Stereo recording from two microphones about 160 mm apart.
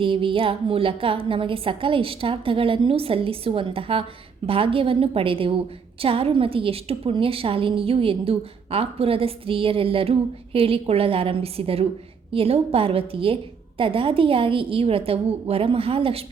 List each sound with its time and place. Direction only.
0.0 s a woman's voice: 35° right (ahead or behind)